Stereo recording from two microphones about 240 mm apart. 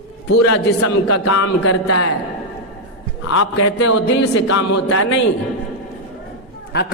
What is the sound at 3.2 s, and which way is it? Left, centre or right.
A man's voice, left.